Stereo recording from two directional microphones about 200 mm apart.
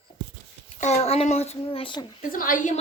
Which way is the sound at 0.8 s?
35° left (ahead or behind).